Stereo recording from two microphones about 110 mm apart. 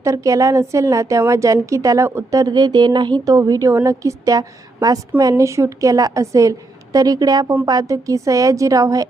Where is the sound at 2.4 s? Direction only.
40° right (ahead or behind).